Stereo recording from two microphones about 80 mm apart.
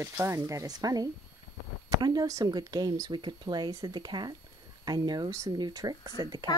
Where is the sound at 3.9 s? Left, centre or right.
Right.